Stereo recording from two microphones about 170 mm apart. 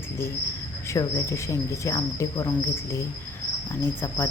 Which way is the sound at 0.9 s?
20° left (ahead or behind).